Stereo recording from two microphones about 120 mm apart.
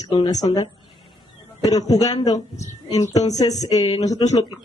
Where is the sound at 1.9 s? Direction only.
30° left (ahead or behind).